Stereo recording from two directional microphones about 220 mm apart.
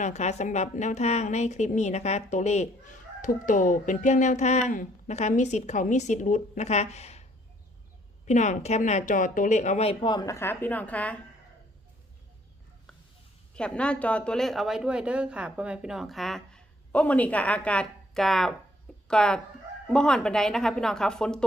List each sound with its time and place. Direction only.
0.0 s speech: 30° left (ahead or behind)
8.3 s speech: 35° left (ahead or behind); by 11.2 s 5° left (ahead or behind)
13.6 s speech: 5° left (ahead or behind)